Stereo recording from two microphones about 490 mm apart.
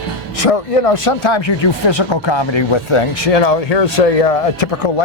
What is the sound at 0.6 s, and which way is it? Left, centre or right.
Speech, left.